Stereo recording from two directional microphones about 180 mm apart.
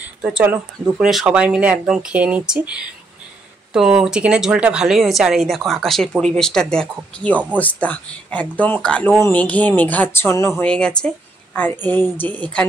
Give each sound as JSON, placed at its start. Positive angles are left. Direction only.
{"t": 0.2, "sound": "speech", "side_deg": -10}